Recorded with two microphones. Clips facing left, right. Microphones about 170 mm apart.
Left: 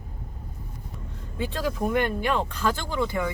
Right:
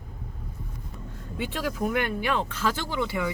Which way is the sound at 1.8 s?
25° left (ahead or behind).